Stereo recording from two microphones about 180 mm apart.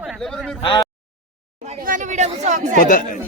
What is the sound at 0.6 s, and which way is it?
Speech, 25° left (ahead or behind).